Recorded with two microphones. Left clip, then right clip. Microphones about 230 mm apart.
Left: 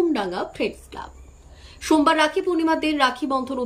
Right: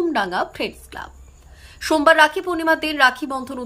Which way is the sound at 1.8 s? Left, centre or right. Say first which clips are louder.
Right 4 dB; centre.